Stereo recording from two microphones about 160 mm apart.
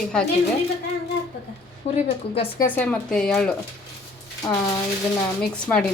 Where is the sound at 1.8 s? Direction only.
40° left (ahead or behind).